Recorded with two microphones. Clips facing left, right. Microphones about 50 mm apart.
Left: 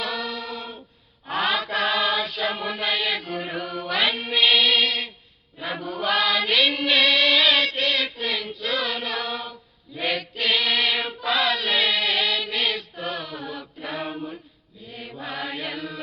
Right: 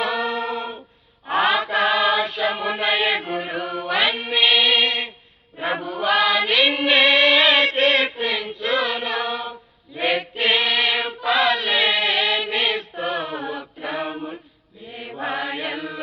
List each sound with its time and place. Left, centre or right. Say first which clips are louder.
0.0 s a capella: right 6 dB; right
1.3 s chant: right 5 dB; centre
3.4 s mantra: right 3 dB; centre
5.8 s chant: right 3 dB; centre; by 8.3 s right
8.3 s choir: right 4 dB; centre
10.7 s chant: right 2 dB; centre
14.8 s mantra: right 6 dB; right
15.4 s chant: right 4 dB; right